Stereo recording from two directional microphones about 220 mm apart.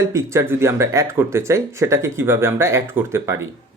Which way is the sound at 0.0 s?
15° right (ahead or behind).